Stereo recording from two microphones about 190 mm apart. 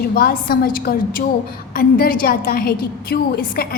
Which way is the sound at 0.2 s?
50° left (ahead or behind).